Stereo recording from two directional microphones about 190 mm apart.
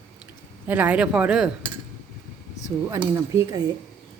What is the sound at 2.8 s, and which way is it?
Speech, 15° right (ahead or behind).